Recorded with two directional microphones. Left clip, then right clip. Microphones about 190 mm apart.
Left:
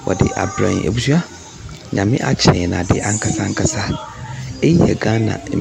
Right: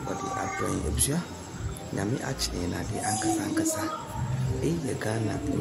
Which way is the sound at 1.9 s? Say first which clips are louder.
Left 14 dB; 75° right (ahead or behind).